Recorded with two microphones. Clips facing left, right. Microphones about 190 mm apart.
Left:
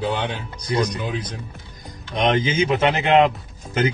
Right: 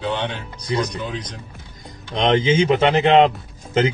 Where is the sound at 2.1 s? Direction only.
25° right (ahead or behind).